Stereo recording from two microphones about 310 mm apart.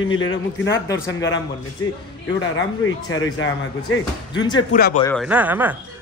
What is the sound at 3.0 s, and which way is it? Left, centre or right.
Speech, left.